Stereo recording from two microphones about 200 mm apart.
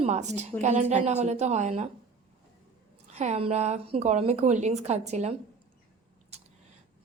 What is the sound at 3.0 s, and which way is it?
A woman's voice, 35° right (ahead or behind).